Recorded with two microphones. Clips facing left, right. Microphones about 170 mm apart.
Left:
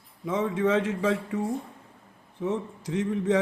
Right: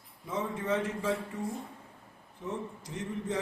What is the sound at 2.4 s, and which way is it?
Speech, 90° left.